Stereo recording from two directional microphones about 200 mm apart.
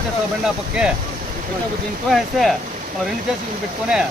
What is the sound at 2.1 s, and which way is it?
Speech, centre (ahead or behind).